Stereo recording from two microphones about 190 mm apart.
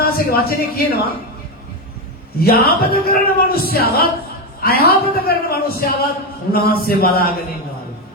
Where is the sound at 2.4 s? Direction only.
55° left (ahead or behind).